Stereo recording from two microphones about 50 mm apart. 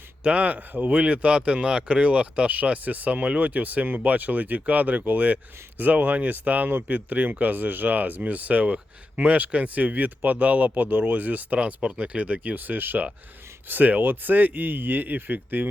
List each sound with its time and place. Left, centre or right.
0.2 s speech: right
6.7 s speech: right
6.9 s speech: right